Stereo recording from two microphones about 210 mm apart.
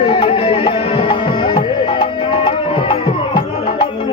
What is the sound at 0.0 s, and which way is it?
Music, 25° left (ahead or behind).